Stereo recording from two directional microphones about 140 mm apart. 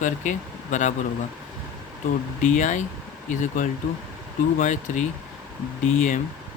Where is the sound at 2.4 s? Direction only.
65° left (ahead or behind).